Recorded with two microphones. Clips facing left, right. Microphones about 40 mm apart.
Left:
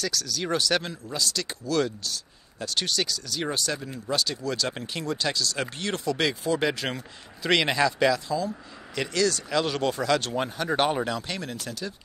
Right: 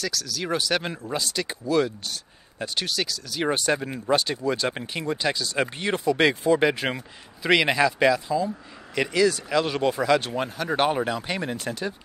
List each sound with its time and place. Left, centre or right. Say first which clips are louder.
0.0 s speech: even; centre
0.8 s speech: right 2 dB; right
2.7 s speech: left 1 dB; centre
3.4 s speech: right 7 dB; right
11.5 s speech: right 5 dB; right